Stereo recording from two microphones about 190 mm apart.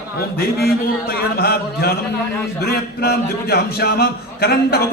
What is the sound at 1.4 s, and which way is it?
A man's voice, 55° left (ahead or behind).